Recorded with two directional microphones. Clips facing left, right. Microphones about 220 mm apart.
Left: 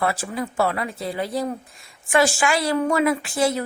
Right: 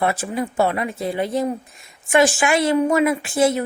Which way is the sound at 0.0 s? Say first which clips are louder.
Right 3 dB; 25° right (ahead or behind).